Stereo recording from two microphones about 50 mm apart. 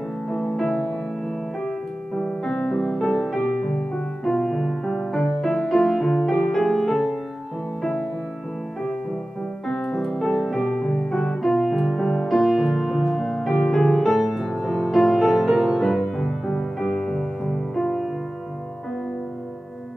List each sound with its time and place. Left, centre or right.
0.3 s music: centre
2.1 s piano: centre
2.8 s music: centre
3.3 s music: left
4.2 s music: centre
6.3 s music: centre
7.8 s music: centre
9.7 s piano: centre
10.6 s music: centre
11.4 s music: centre
13.6 s music: centre